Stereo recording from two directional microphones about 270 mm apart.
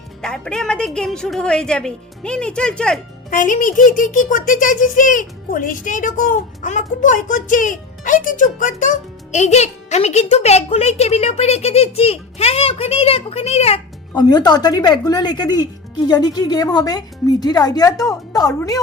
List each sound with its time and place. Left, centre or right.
0.2 s a woman's voice: centre
3.2 s a child's voice: left; by 18.8 s centre